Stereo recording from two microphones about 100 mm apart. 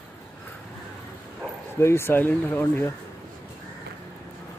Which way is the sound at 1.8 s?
25° left (ahead or behind).